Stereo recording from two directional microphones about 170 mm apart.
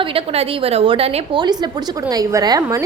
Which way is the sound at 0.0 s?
35° right (ahead or behind).